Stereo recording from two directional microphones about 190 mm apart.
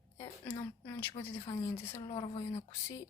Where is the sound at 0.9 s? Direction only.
15° left (ahead or behind).